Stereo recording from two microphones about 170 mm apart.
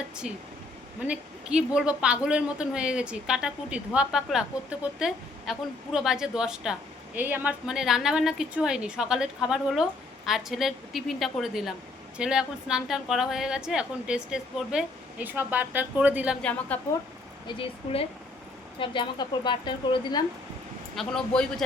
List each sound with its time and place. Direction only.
1.0 s a woman's voice: 5° right (ahead or behind)
16.4 s a woman's voice: 10° left (ahead or behind)
17.4 s a woman's voice: 30° left (ahead or behind)
20.9 s a woman's voice: 5° left (ahead or behind)